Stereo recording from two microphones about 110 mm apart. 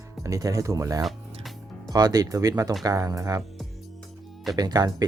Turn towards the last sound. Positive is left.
turn(degrees=-35)  # may be behind; listen again after turning